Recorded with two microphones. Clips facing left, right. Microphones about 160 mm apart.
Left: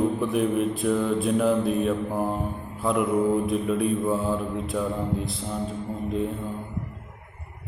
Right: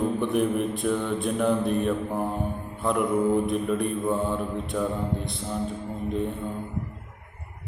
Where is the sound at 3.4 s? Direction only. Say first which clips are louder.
Left 1 dB; centre (ahead or behind).